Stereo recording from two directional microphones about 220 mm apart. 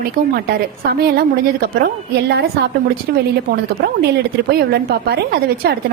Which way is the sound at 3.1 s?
45° right (ahead or behind).